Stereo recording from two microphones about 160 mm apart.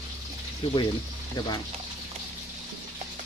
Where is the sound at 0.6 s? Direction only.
35° left (ahead or behind).